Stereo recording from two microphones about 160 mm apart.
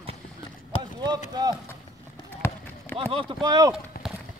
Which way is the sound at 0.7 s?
35° left (ahead or behind).